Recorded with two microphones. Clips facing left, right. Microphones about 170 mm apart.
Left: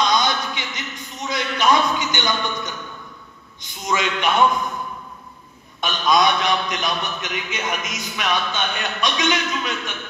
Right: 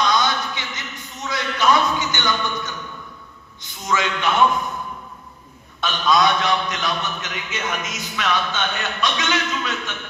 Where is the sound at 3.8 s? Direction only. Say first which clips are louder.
Even; 15° left (ahead or behind).